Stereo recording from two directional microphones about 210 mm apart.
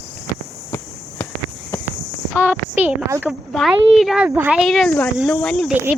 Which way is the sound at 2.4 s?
10° right (ahead or behind).